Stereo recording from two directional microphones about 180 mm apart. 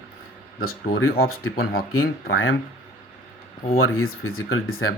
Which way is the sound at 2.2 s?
90° left.